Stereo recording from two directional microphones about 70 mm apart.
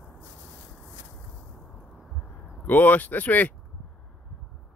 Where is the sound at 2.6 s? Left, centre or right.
Left.